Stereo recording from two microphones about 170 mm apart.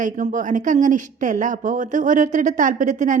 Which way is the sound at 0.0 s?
45° right (ahead or behind).